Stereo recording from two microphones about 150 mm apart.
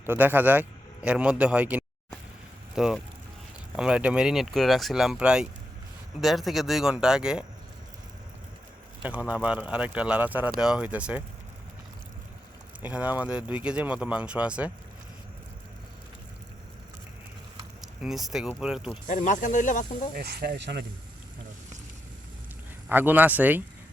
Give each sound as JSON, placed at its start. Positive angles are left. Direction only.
{"t": 0.0, "sound": "a man's voice", "side_deg": -15}
{"t": 9.0, "sound": "speech", "side_deg": -10}
{"t": 12.8, "sound": "speech", "side_deg": -10}
{"t": 17.7, "sound": "speech", "side_deg": 0}
{"t": 19.0, "sound": "speech", "side_deg": 55}
{"t": 20.1, "sound": "speech", "side_deg": -90}
{"t": 22.9, "sound": "speech", "side_deg": -10}